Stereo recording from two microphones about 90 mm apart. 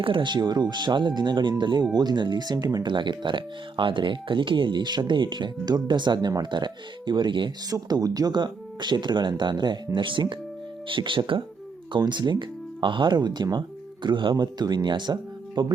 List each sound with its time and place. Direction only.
0.0 s speech: 70° right (ahead or behind)
7.7 s speech: 45° right (ahead or behind); by 11.4 s 65° right (ahead or behind)
11.9 s speech: 55° right (ahead or behind)